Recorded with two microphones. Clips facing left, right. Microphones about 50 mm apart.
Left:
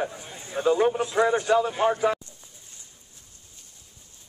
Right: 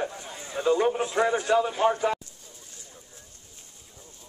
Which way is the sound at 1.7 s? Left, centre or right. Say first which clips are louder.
Left 1 dB; centre.